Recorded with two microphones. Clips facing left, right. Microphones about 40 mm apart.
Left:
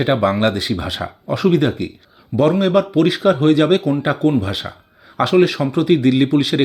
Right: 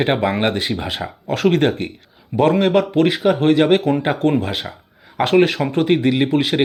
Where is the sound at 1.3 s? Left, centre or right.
Right.